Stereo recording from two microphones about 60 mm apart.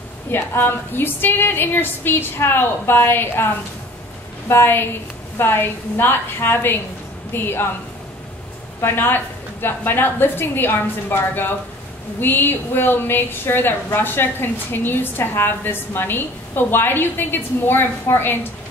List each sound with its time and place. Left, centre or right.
0.3 s a woman's voice: left
4.5 s a woman's voice: left
8.8 s a woman's voice: left